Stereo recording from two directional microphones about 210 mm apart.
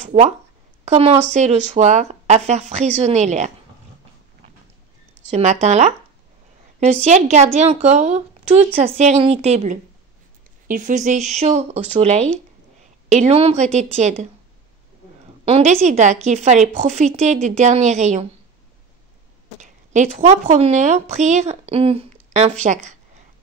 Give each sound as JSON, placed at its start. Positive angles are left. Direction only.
{"t": 0.0, "sound": "a sound", "side_deg": -30}
{"t": 0.8, "sound": "a woman's voice", "side_deg": -30}
{"t": 5.3, "sound": "a woman's voice", "side_deg": -30}
{"t": 15.4, "sound": "a woman's voice", "side_deg": -30}
{"t": 19.6, "sound": "a woman's voice", "side_deg": -35}